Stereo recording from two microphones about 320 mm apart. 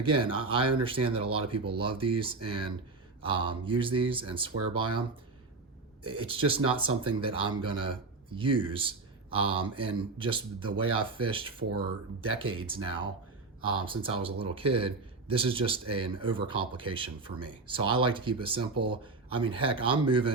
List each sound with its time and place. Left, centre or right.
0.0 s a man's voice: centre
6.1 s a man's voice: centre